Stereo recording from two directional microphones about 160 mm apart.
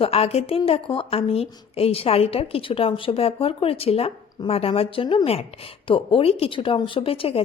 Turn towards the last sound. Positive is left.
turn(degrees=35)  # may be behind; listen again after turning